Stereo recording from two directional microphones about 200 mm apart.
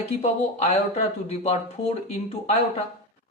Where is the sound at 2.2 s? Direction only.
30° left (ahead or behind).